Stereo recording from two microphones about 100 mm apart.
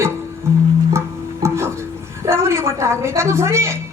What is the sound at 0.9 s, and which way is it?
Music, 25° right (ahead or behind).